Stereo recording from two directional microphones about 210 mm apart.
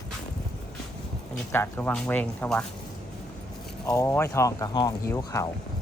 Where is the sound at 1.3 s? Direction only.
10° left (ahead or behind).